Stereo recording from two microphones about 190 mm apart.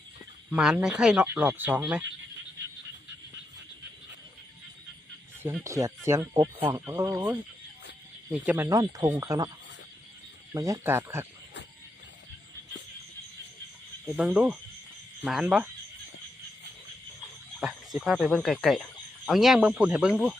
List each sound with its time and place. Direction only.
0.5 s speech: 5° right (ahead or behind)
5.4 s speech: 10° right (ahead or behind)
10.5 s speech: 15° right (ahead or behind)
14.2 s speech: 5° right (ahead or behind)
17.6 s speech: 5° right (ahead or behind)